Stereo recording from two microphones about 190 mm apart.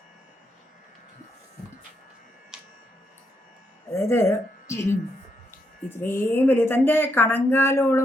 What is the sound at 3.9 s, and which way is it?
A woman's voice, 15° left (ahead or behind).